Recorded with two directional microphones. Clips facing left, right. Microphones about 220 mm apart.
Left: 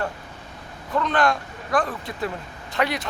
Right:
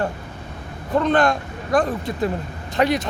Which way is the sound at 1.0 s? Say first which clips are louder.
Right 4 dB; 45° right (ahead or behind).